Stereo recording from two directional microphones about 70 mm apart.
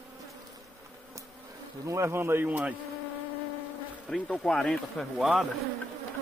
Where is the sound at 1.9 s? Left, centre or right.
Right.